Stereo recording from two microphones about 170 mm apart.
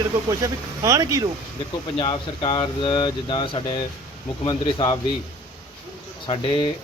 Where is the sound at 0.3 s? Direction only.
20° right (ahead or behind).